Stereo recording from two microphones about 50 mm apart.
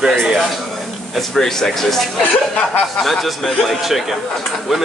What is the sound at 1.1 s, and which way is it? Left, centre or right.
Speech, centre.